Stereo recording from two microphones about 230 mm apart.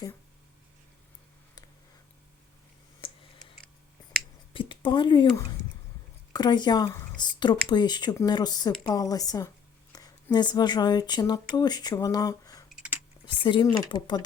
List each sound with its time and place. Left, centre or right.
4.5 s speech: left
12.7 s a sound: centre
13.2 s speech: left